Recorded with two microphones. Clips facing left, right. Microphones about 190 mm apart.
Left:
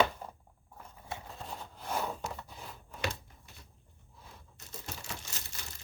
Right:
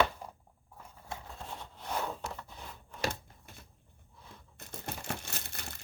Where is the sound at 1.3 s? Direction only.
Centre (ahead or behind).